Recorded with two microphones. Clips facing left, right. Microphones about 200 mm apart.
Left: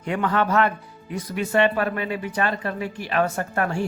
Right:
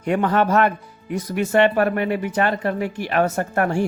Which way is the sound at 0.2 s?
40° right (ahead or behind).